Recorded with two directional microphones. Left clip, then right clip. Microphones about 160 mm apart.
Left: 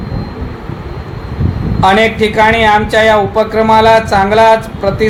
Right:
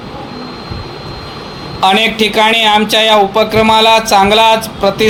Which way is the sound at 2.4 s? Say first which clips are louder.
Left 1 dB; 40° right (ahead or behind).